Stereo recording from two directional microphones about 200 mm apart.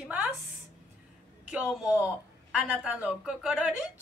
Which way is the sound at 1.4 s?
5° right (ahead or behind).